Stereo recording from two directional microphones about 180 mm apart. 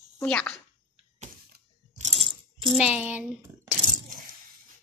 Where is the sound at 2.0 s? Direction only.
30° right (ahead or behind).